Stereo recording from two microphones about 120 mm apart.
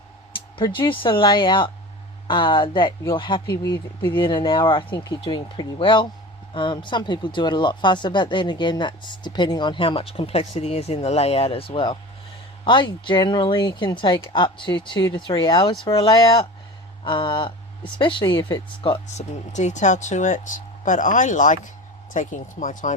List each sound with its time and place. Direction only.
0.5 s speech: 45° left (ahead or behind)
19.0 s speech: 80° left